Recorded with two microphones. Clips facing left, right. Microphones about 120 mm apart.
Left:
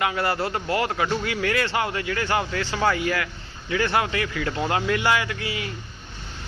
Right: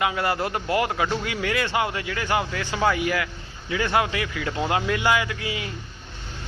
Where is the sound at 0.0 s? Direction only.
15° right (ahead or behind).